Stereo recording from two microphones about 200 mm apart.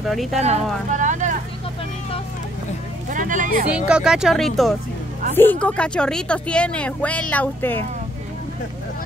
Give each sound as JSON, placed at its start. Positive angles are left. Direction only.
{"t": 0.0, "sound": "a woman's voice", "side_deg": 0}
{"t": 0.4, "sound": "speech", "side_deg": -35}
{"t": 3.1, "sound": "speech", "side_deg": -40}
{"t": 3.6, "sound": "a woman's voice", "side_deg": -5}